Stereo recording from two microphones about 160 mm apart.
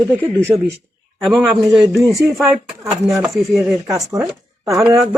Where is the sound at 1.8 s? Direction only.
20° right (ahead or behind).